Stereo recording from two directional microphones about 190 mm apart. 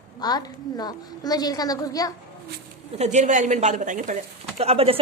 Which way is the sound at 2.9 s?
35° right (ahead or behind).